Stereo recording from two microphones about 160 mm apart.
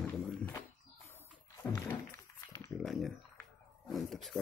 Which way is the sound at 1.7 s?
20° left (ahead or behind).